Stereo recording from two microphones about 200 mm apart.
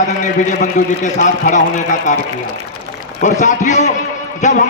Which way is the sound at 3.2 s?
35° left (ahead or behind).